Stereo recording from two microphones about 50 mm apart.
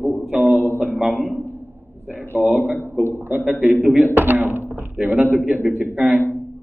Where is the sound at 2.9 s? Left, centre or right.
Right.